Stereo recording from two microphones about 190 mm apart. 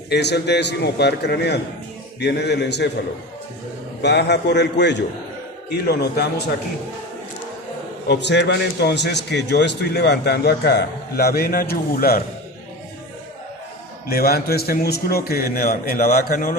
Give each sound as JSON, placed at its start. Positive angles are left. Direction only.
{"t": 0.1, "sound": "a man's voice", "side_deg": 60}
{"t": 4.0, "sound": "a man's voice", "side_deg": 65}
{"t": 8.0, "sound": "a man's voice", "side_deg": 60}
{"t": 14.1, "sound": "a man's voice", "side_deg": 55}